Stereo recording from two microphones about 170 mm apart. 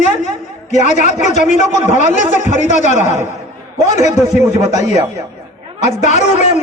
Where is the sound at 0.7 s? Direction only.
45° left (ahead or behind).